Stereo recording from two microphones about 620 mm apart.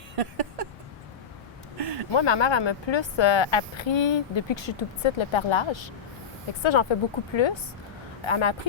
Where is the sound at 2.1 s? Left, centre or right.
Left.